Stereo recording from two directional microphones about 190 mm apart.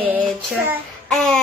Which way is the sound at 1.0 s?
5° left (ahead or behind).